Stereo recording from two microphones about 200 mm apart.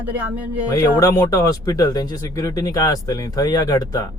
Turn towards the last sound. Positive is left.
turn(degrees=20)  # may be behind; listen again after turning